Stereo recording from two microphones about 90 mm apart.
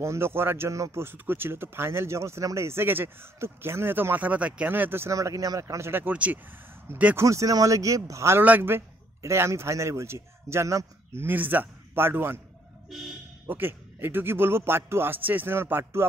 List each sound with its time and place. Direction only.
0.0 s speech: 30° right (ahead or behind)
5.1 s speech: 40° right (ahead or behind); by 6.4 s 15° right (ahead or behind)
7.2 s a man's voice: 35° right (ahead or behind)
11.2 s speech: 20° right (ahead or behind)
13.5 s speech: 25° right (ahead or behind)